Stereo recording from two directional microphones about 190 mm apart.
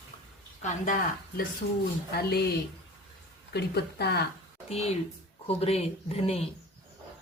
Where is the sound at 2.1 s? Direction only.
55° left (ahead or behind).